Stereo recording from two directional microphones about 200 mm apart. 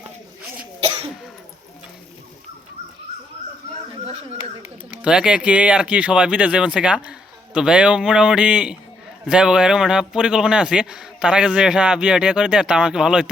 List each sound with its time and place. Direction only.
0.8 s cough: 30° right (ahead or behind)
5.0 s a man's voice: 5° right (ahead or behind)